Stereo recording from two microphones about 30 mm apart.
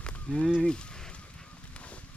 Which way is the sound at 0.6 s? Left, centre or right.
Left.